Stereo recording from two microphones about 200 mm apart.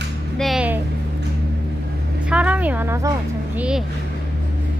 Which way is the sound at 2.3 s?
5° right (ahead or behind).